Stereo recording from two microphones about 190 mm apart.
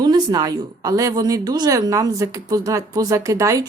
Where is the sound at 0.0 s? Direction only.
20° right (ahead or behind).